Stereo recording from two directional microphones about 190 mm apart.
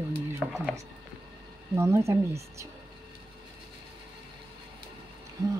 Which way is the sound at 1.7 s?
15° right (ahead or behind).